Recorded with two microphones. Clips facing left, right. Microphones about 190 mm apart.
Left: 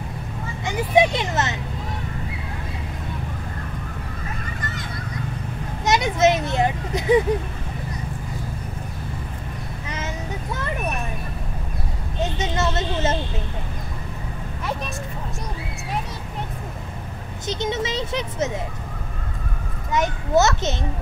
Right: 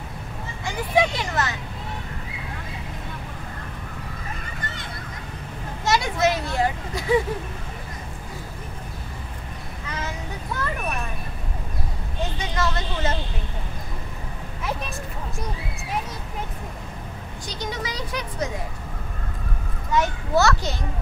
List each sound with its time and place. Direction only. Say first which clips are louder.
0.7 s a sound: left 4 dB; 20° left (ahead or behind)
5.9 s vehicle: left 3 dB; 20° left (ahead or behind)
12.4 s vehicle: left 2 dB; 25° left (ahead or behind)
17.5 s speech: left 7 dB; 25° left (ahead or behind)
19.9 s children playing: left 2 dB; 20° left (ahead or behind)